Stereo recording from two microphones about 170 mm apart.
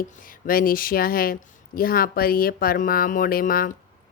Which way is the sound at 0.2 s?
55° left (ahead or behind).